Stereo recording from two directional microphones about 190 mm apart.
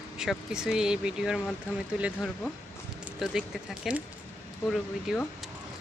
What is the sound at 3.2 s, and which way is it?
Speech, centre (ahead or behind).